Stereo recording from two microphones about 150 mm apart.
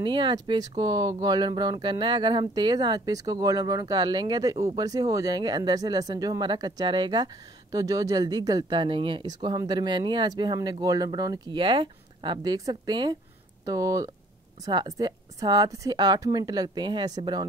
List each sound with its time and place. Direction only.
0.0 s speech: 30° right (ahead or behind)